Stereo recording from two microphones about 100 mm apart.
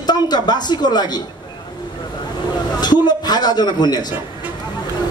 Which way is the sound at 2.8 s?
45° left (ahead or behind).